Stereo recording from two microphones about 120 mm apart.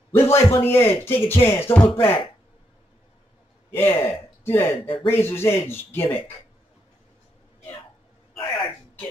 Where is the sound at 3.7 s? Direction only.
20° left (ahead or behind).